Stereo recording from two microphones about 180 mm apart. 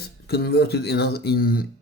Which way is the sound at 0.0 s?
60° left (ahead or behind).